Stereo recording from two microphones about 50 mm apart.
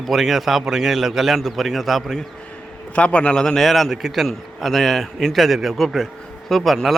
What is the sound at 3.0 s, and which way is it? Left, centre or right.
Speech, left.